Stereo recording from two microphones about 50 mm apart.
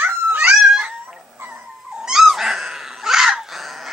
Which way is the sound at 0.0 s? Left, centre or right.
Right.